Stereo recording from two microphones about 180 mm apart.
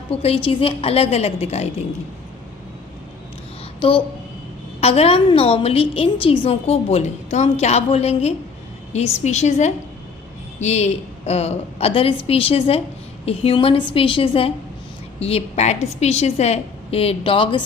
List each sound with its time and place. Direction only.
0.1 s a woman's voice: 30° left (ahead or behind)
3.8 s a woman's voice: 30° left (ahead or behind)